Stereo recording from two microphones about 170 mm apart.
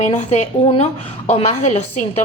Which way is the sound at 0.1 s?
45° left (ahead or behind).